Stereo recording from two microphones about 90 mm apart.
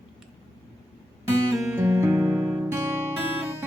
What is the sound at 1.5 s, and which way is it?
Music, 30° right (ahead or behind).